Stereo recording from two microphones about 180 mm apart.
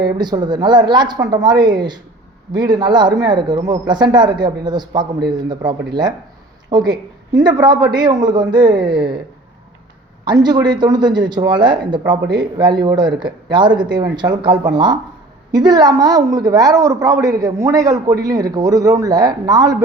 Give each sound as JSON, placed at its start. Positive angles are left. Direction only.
{"t": 0.0, "sound": "a woman's voice", "side_deg": -25}
{"t": 10.2, "sound": "a woman's voice", "side_deg": -25}